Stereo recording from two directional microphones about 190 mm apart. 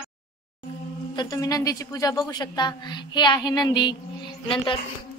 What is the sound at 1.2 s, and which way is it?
A woman's voice, 20° left (ahead or behind).